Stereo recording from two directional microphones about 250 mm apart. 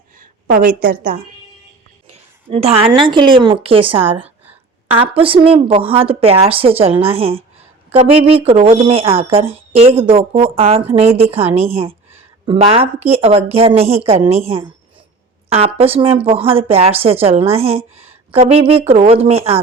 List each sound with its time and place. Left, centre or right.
0.2 s a woman's voice: right
2.0 s a woman's voice: right